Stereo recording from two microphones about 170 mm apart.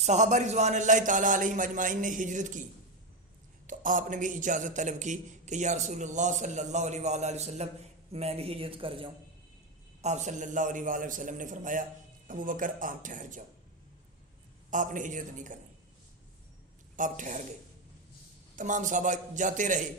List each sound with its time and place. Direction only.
0.0 s a man's voice: 45° right (ahead or behind)
3.7 s a man's voice: 50° right (ahead or behind); by 9.0 s 30° right (ahead or behind)
10.0 s a man's voice: 45° right (ahead or behind)
14.7 s a man's voice: 50° right (ahead or behind)
17.0 s a man's voice: 50° right (ahead or behind)
18.5 s a man's voice: 50° right (ahead or behind)